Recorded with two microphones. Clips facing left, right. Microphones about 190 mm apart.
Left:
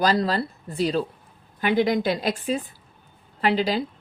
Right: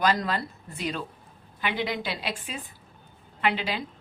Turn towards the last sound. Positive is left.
turn(degrees=40)  # may be behind; listen again after turning